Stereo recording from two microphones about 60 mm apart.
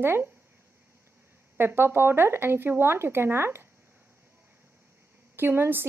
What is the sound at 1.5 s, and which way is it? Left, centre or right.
Speech, right.